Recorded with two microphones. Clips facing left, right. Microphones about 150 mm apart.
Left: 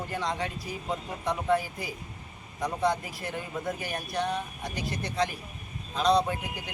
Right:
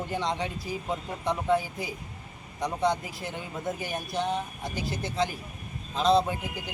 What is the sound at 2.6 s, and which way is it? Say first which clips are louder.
Speech: right 1 dB; centre (ahead or behind).